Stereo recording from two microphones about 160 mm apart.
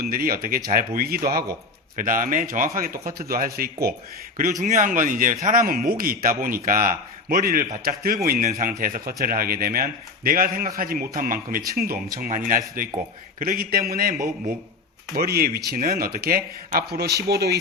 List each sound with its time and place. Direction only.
0.0 s a man's voice: 65° right (ahead or behind)
2.0 s a man's voice: 55° right (ahead or behind); by 3.9 s 70° right (ahead or behind)
4.6 s a man's voice: 55° right (ahead or behind)
8.4 s a man's voice: 55° right (ahead or behind)
15.1 s speech: 75° right (ahead or behind)